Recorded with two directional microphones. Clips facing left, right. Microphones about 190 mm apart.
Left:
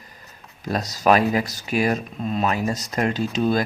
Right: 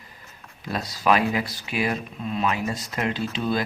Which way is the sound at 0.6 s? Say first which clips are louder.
Left 4 dB; 40° left (ahead or behind).